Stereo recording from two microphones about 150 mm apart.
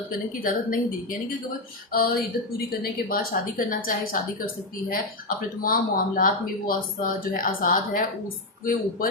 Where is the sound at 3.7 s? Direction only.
70° left (ahead or behind).